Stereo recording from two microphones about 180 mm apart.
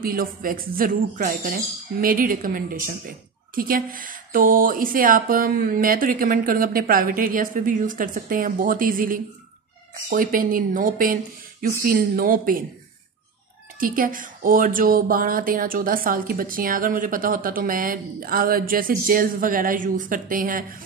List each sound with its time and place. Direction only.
0.0 s speech: 55° right (ahead or behind)
13.7 s speech: 50° right (ahead or behind)